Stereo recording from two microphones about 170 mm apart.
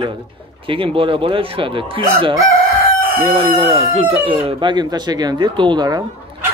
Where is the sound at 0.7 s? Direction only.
30° right (ahead or behind).